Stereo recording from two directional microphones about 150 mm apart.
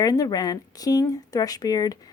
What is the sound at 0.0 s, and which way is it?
Speech, 25° left (ahead or behind).